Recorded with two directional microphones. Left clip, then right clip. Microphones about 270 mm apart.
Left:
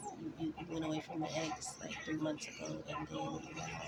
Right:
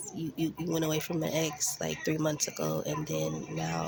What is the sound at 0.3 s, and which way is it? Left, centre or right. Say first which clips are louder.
Speech: right 12 dB; right.